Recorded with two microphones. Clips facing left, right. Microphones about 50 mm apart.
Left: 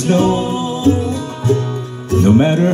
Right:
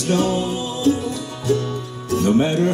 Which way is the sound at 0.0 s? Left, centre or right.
Left.